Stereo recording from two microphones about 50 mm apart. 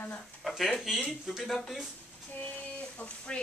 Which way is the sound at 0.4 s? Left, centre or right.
Centre.